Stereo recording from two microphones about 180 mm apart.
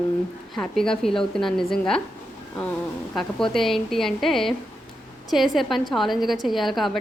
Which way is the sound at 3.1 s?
5° left (ahead or behind).